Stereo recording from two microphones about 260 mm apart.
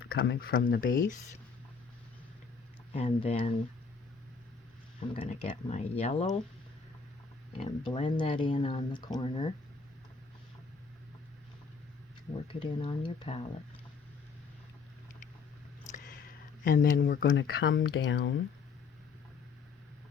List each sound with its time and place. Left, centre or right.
0.2 s speech: left
2.9 s speech: left
4.9 s speech: left
7.5 s speech: left
12.5 s speech: centre
15.8 s a sound: left
16.6 s speech: left